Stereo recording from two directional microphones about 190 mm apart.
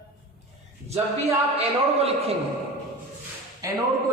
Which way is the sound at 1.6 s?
30° right (ahead or behind).